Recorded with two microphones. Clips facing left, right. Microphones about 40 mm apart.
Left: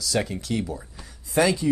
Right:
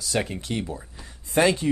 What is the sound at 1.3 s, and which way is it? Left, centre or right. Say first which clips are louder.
Speech: even; right.